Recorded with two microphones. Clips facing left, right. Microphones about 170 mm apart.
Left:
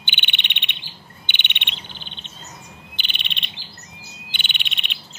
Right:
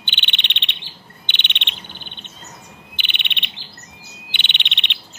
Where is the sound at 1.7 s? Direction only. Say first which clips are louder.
Right 1 dB; 50° right (ahead or behind).